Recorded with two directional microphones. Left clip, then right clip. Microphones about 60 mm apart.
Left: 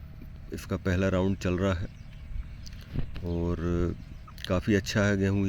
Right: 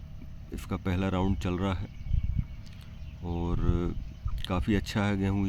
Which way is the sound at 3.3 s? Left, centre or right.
Left.